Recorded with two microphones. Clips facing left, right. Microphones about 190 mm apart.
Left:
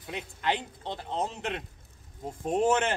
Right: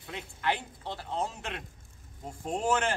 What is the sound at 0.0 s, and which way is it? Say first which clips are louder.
A man's voice: left 1 dB; 20° left (ahead or behind).